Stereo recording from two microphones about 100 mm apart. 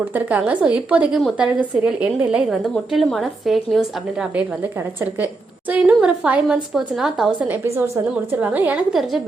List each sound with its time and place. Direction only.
0.0 s a woman's voice: 15° right (ahead or behind)
2.7 s a woman's voice: centre (ahead or behind)
7.4 s a woman's voice: 20° right (ahead or behind)
8.9 s a woman's voice: centre (ahead or behind)